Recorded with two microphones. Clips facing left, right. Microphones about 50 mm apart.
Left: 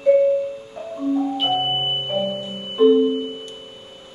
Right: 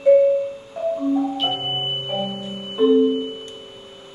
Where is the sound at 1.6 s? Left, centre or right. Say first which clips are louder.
Left 3 dB; centre.